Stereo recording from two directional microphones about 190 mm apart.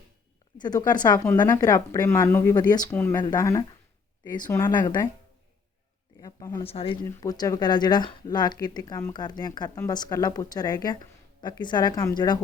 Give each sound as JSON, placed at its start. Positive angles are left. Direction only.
{"t": 0.6, "sound": "a woman's voice", "side_deg": 20}
{"t": 4.8, "sound": "speech", "side_deg": 25}
{"t": 6.1, "sound": "speech", "side_deg": 20}
{"t": 6.7, "sound": "speech", "side_deg": 30}
{"t": 7.0, "sound": "speech", "side_deg": 15}